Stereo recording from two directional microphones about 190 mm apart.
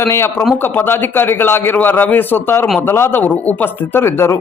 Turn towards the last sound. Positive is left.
turn(degrees=15)  # may be behind; listen again after turning